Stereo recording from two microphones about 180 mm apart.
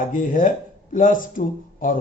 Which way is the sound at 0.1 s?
45° left (ahead or behind).